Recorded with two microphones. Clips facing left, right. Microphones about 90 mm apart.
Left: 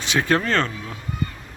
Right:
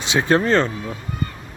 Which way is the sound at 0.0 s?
20° right (ahead or behind).